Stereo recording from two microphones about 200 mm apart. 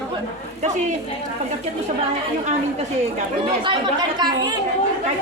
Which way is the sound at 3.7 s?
20° right (ahead or behind).